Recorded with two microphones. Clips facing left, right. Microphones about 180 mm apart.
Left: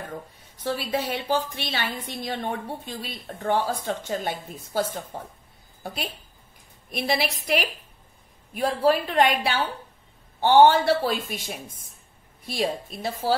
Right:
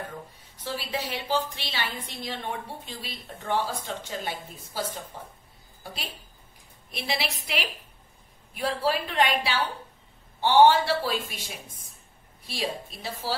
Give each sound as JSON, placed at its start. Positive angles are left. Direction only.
{"t": 0.7, "sound": "a woman's voice", "side_deg": 55}
{"t": 6.9, "sound": "a woman's voice", "side_deg": 45}